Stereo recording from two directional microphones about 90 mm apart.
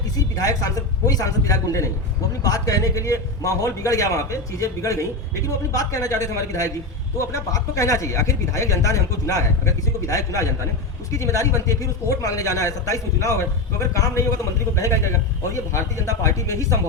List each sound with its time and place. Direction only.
0.2 s a man's voice: 40° left (ahead or behind)